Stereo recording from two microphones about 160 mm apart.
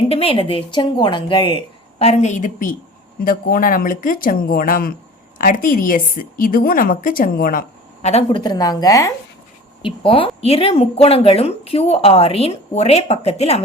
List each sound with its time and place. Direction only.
0.1 s a woman's voice: 35° left (ahead or behind); by 7.6 s 60° left (ahead or behind)
8.0 s speech: 40° left (ahead or behind)
8.4 s a woman's voice: 25° left (ahead or behind)
9.8 s speech: 35° left (ahead or behind)